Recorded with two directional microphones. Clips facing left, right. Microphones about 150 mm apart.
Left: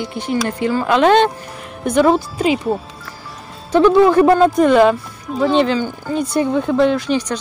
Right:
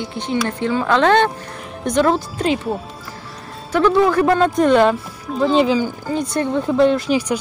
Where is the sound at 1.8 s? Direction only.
5° left (ahead or behind).